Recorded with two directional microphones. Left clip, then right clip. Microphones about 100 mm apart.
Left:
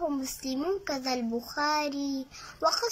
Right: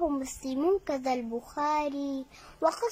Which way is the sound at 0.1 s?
35° right (ahead or behind).